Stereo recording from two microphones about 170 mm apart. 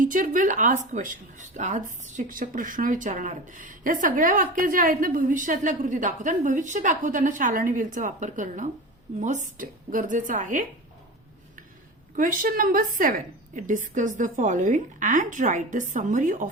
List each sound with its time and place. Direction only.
0.0 s speech: 50° right (ahead or behind)
12.1 s speech: 55° right (ahead or behind)